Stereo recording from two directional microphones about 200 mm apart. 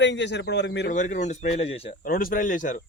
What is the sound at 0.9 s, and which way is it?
Speech, 40° left (ahead or behind).